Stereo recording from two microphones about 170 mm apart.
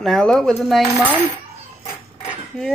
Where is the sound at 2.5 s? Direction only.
5° left (ahead or behind).